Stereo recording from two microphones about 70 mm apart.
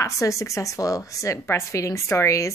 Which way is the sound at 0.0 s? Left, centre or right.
Left.